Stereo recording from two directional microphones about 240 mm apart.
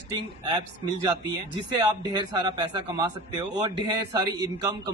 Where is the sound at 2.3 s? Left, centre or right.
Centre.